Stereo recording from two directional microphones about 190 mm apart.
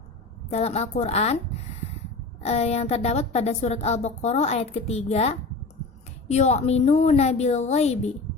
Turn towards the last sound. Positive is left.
turn(degrees=35)  # may be behind; listen again after turning